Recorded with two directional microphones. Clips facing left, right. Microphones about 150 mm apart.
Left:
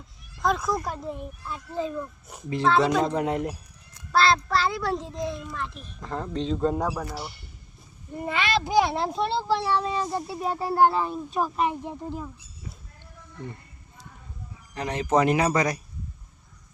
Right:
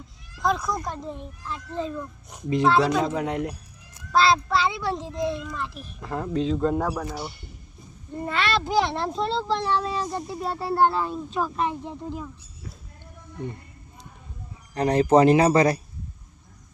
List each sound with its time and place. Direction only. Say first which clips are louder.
0.4 s a child's voice: even; centre (ahead or behind)
6.7 s a child's voice: right 2 dB; 10° left (ahead or behind)
8.1 s a child's voice: right 1 dB; 10° left (ahead or behind)
14.8 s speech: right 6 dB; 35° right (ahead or behind)